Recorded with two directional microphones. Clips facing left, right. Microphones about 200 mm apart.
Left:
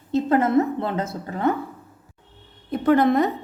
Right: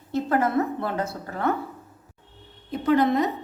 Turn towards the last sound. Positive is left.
turn(degrees=55)  # may be behind; listen again after turning